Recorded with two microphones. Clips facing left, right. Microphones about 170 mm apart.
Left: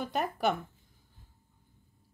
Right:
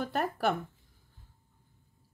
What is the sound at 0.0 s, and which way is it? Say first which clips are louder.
Speech: even; centre (ahead or behind).